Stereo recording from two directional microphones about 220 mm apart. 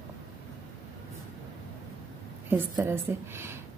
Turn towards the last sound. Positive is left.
turn(degrees=-10)  # may be behind; listen again after turning